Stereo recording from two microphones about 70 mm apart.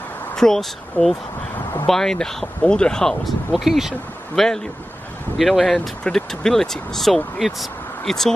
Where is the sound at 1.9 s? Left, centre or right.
Centre.